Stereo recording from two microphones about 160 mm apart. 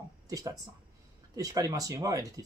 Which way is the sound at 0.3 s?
20° right (ahead or behind).